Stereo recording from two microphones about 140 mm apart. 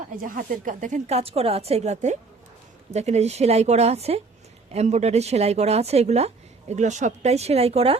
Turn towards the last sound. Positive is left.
turn(degrees=-45)  # may be behind; listen again after turning